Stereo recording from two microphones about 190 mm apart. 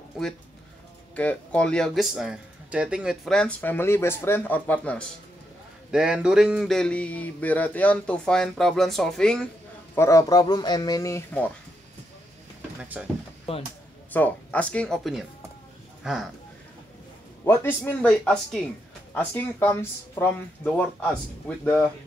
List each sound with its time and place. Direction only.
1.1 s speech: 5° left (ahead or behind)
5.9 s a sound: 5° right (ahead or behind)
9.9 s speech: 15° left (ahead or behind)
12.8 s speech: 10° right (ahead or behind)
13.5 s speech: 30° left (ahead or behind)
14.1 s speech: 10° left (ahead or behind)
17.5 s speech: 10° left (ahead or behind)